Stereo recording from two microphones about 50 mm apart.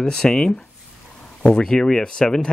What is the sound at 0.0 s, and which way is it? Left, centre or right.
Speech, centre.